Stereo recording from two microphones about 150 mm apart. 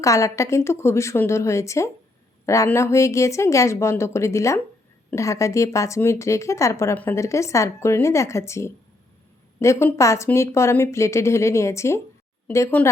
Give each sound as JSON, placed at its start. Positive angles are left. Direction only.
{"t": 0.0, "sound": "a woman's voice", "side_deg": 20}